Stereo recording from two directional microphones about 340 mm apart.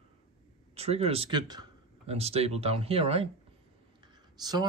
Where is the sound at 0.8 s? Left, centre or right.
Centre.